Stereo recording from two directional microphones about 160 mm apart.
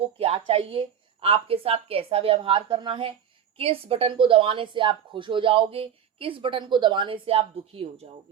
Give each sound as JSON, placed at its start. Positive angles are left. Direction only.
{"t": 0.0, "sound": "a woman's voice", "side_deg": -35}